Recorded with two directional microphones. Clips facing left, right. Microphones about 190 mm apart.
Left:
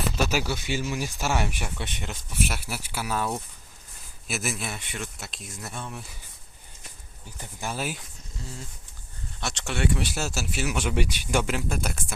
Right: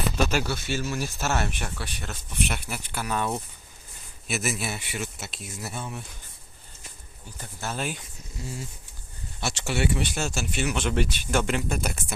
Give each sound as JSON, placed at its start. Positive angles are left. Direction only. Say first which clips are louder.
{"t": 0.3, "sound": "speech", "louder": "even", "side_deg": 10}
{"t": 2.3, "sound": "speech", "louder": "even", "side_deg": 5}
{"t": 7.3, "sound": "speech", "louder": "even", "side_deg": 15}
{"t": 8.4, "sound": "speech", "louder": "right 4 dB", "side_deg": -10}